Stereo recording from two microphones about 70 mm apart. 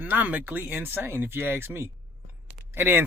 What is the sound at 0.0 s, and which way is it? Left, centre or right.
Speech, right.